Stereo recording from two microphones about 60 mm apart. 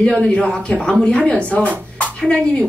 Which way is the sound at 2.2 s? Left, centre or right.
Centre.